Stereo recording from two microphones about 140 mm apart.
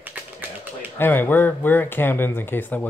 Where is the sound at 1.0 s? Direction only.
15° left (ahead or behind).